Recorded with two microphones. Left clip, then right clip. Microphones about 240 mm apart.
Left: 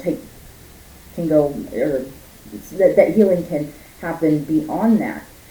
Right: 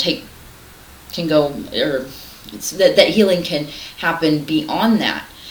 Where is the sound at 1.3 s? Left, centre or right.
Centre.